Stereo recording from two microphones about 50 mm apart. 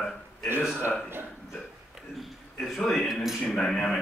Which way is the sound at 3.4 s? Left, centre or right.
Centre.